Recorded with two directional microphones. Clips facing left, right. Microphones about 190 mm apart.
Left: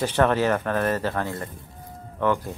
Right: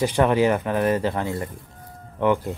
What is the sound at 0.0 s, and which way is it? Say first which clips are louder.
Speech: right 2 dB; 10° right (ahead or behind).